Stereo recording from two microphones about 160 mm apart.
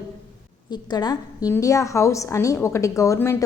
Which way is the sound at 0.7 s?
25° left (ahead or behind).